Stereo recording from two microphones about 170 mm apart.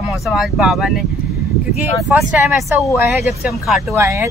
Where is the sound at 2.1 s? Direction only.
5° right (ahead or behind).